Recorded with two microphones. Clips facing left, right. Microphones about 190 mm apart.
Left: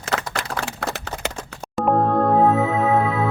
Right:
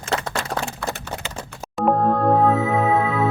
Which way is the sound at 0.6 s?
70° left (ahead or behind).